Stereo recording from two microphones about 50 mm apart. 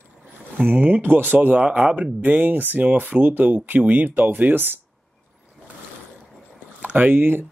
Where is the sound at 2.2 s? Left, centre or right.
Right.